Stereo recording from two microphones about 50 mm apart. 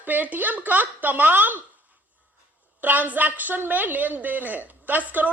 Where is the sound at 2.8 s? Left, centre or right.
Right.